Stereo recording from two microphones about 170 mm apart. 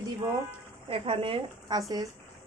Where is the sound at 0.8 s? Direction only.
35° right (ahead or behind).